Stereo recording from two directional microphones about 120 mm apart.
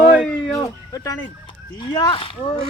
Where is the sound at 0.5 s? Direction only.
25° left (ahead or behind).